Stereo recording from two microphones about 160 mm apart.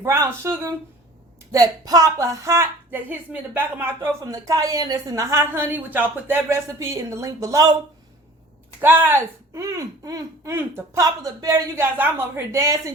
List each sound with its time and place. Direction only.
0.0 s a woman's voice: 15° right (ahead or behind)
8.8 s speech: 15° right (ahead or behind)